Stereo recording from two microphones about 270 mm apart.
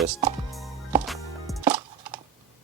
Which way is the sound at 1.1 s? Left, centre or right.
Centre.